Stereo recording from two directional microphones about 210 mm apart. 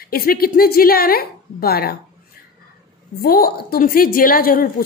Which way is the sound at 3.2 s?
45° left (ahead or behind).